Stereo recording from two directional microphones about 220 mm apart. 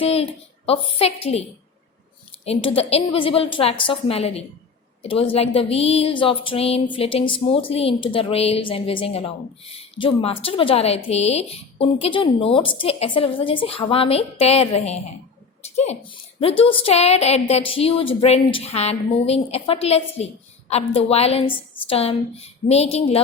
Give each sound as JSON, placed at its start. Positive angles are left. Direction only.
{"t": 0.0, "sound": "a woman's voice", "side_deg": 25}
{"t": 15.6, "sound": "a sound", "side_deg": 30}
{"t": 16.4, "sound": "a woman's voice", "side_deg": 25}